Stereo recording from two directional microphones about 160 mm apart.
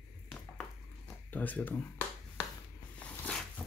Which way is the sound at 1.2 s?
10° left (ahead or behind).